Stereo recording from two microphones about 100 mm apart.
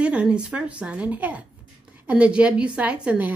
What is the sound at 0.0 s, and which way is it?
A woman's voice, 10° right (ahead or behind).